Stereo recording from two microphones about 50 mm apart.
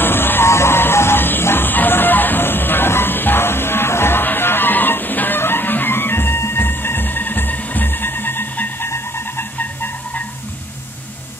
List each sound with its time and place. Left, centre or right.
0.0 s music: left
0.5 s music: left